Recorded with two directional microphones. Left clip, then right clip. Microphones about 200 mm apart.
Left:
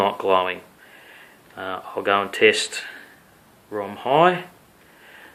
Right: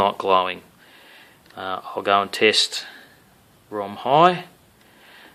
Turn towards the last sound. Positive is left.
turn(degrees=-45)  # may be behind; listen again after turning